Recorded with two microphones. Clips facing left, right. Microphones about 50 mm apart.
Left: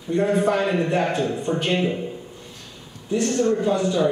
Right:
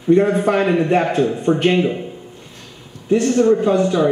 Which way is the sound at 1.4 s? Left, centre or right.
Right.